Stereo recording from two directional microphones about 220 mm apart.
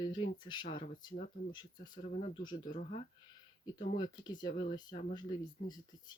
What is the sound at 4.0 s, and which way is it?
Speech, 20° left (ahead or behind).